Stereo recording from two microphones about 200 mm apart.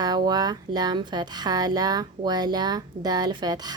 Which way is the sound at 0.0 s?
20° right (ahead or behind).